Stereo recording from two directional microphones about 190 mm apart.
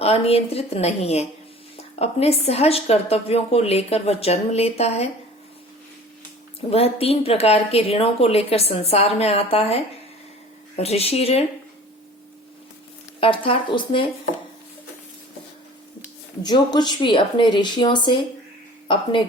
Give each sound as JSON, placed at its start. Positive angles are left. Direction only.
{"t": 0.0, "sound": "a woman's voice", "side_deg": 30}
{"t": 6.7, "sound": "a woman's voice", "side_deg": 30}
{"t": 13.1, "sound": "speech", "side_deg": 25}
{"t": 16.4, "sound": "speech", "side_deg": 20}